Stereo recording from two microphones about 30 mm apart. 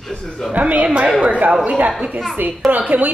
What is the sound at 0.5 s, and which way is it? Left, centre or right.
Speech, right.